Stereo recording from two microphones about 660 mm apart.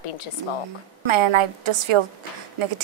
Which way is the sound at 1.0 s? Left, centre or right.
Right.